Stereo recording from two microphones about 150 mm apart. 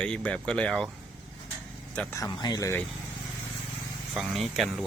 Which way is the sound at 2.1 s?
25° left (ahead or behind).